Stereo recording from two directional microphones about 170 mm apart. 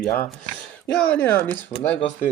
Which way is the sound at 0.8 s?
10° left (ahead or behind).